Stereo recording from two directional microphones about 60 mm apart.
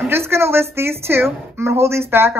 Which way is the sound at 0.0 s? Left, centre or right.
Right.